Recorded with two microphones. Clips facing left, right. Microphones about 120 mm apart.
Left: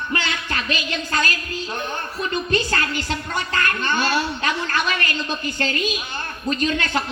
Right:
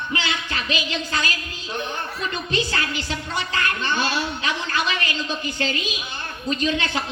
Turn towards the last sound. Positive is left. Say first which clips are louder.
# left 1 dB
turn(degrees=50)  # may be behind; listen again after turning